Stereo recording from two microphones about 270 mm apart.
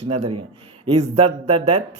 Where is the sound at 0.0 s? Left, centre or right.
Right.